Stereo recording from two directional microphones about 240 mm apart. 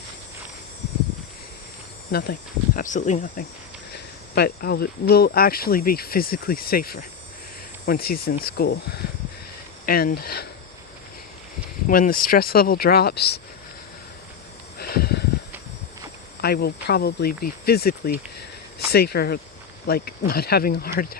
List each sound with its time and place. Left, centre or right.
2.7 s speech: left
11.9 s speech: left
14.8 s a sound: left
16.4 s speech: left